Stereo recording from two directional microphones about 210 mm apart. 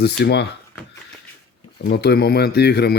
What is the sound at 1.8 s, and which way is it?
Speech, 50° left (ahead or behind).